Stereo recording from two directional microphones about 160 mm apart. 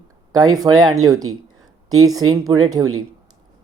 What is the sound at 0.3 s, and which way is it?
Speech, 25° right (ahead or behind).